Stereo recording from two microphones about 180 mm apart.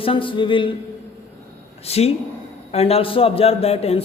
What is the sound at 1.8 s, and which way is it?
A man's voice, 35° left (ahead or behind).